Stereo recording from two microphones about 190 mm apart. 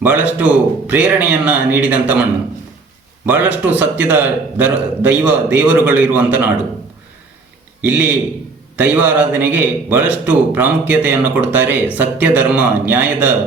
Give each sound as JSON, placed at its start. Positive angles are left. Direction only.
{"t": 0.0, "sound": "a man's voice", "side_deg": -10}
{"t": 3.2, "sound": "a man's voice", "side_deg": -10}
{"t": 7.8, "sound": "a man's voice", "side_deg": -10}